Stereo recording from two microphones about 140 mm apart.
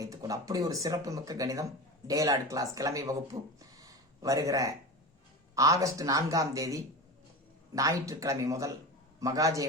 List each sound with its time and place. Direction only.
0.0 s speech: 25° right (ahead or behind)